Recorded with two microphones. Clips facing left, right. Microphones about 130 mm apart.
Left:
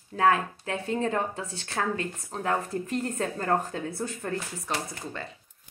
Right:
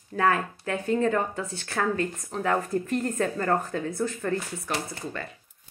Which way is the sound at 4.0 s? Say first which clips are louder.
Right 4 dB; 25° left (ahead or behind).